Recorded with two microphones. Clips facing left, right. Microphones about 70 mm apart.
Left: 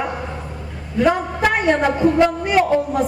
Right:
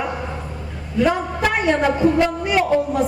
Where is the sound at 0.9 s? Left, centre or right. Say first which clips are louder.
Left 1 dB; left.